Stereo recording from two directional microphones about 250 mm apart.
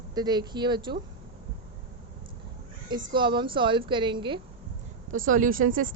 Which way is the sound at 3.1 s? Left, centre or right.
Centre.